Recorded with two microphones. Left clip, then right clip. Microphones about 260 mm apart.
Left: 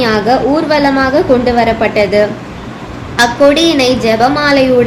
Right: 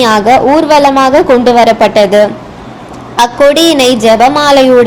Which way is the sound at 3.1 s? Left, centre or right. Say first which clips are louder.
Right 2 dB; right.